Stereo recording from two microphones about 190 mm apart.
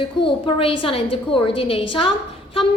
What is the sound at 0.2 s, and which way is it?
A woman's voice, 30° left (ahead or behind).